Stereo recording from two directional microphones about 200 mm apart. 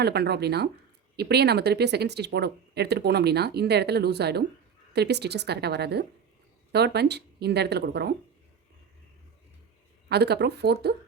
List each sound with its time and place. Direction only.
0.0 s speech: 55° right (ahead or behind)
10.1 s speech: 55° right (ahead or behind)